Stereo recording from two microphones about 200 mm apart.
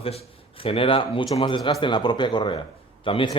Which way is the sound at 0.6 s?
25° left (ahead or behind).